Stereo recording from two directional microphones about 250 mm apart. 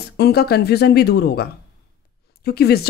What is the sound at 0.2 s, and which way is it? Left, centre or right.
A woman's voice, left.